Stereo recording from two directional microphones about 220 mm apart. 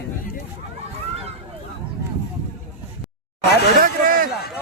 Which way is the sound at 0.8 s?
25° right (ahead or behind).